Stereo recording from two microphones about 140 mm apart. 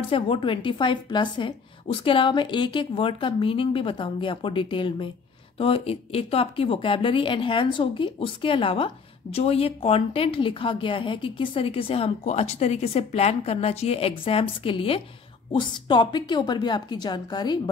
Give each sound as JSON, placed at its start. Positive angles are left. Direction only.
{"t": 0.1, "sound": "speech", "side_deg": 35}